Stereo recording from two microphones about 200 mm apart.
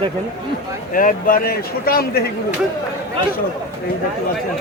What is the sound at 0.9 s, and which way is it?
Speech, 45° left (ahead or behind).